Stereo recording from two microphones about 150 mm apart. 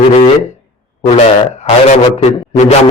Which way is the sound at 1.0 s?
50° left (ahead or behind).